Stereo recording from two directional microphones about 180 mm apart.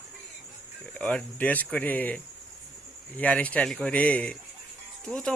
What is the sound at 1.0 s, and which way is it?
Speech, 5° left (ahead or behind).